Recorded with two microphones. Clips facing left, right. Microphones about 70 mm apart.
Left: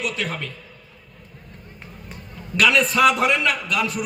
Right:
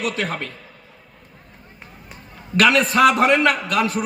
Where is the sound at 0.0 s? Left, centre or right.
Right.